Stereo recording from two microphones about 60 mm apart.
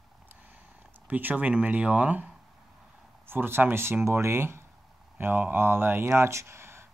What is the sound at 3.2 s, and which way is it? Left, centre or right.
Speech, right.